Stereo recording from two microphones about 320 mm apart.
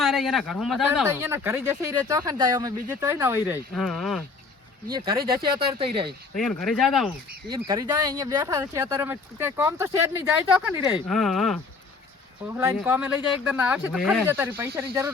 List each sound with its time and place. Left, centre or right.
0.0 s speech: centre
4.9 s speech: centre
5.1 s speech: right
5.8 s speech: centre
6.3 s speech: centre
7.5 s speech: centre